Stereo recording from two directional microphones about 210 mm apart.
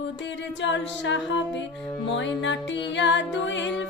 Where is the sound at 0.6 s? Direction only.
60° left (ahead or behind).